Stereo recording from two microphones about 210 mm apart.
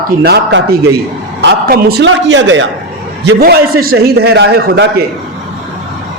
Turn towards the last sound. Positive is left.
turn(degrees=-50)  # may be behind; listen again after turning